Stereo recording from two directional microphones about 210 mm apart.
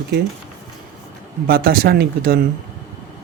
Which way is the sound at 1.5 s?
45° right (ahead or behind).